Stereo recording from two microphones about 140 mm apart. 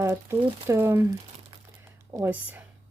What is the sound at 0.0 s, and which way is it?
Speech, 20° right (ahead or behind).